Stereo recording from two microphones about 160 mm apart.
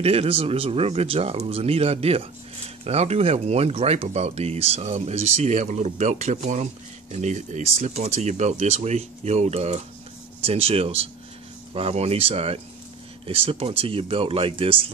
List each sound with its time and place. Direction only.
0.0 s speech: 40° right (ahead or behind)